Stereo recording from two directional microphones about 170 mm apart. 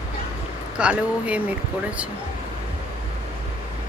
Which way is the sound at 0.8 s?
5° right (ahead or behind).